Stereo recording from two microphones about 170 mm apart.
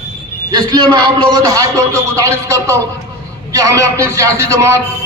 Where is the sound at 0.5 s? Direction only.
25° right (ahead or behind).